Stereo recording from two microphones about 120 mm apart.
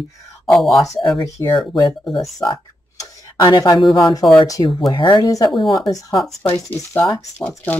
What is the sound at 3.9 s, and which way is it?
Speech, 30° left (ahead or behind).